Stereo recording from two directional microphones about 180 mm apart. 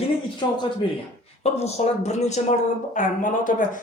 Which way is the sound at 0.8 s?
30° left (ahead or behind).